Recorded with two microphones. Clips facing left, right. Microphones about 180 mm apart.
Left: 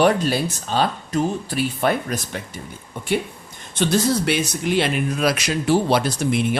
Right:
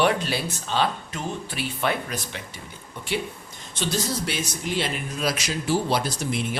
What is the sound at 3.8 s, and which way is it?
Speech, 60° left (ahead or behind).